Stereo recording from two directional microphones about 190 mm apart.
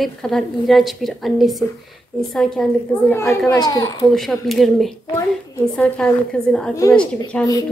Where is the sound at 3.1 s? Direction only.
15° left (ahead or behind).